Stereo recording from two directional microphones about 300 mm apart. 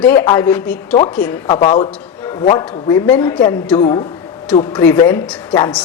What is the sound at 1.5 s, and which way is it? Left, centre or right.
A man's voice, centre.